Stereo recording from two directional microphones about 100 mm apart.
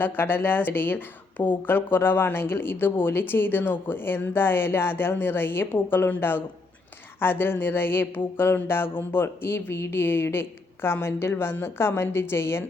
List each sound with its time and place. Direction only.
0.0 s speech: 20° left (ahead or behind)